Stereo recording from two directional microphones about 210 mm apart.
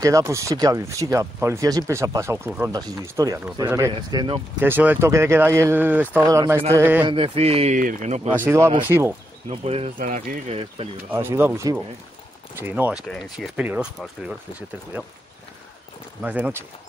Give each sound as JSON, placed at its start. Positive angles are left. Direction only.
{"t": 0.0, "sound": "a man's voice", "side_deg": -15}
{"t": 4.6, "sound": "speech", "side_deg": -10}
{"t": 7.1, "sound": "a man's voice", "side_deg": -25}
{"t": 8.5, "sound": "speech", "side_deg": -10}
{"t": 9.5, "sound": "speech", "side_deg": -30}
{"t": 11.1, "sound": "speech", "side_deg": -10}
{"t": 13.1, "sound": "speech", "side_deg": 0}
{"t": 16.2, "sound": "speech", "side_deg": -5}